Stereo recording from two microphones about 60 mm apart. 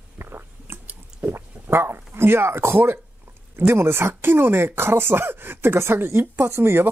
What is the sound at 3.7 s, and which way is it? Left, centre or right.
A woman's voice, right.